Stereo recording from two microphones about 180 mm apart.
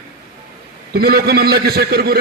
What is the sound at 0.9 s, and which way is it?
A man's voice, 60° right (ahead or behind).